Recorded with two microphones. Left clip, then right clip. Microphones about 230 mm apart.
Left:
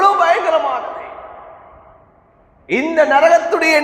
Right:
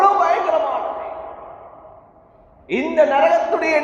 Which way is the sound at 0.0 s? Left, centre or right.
Left.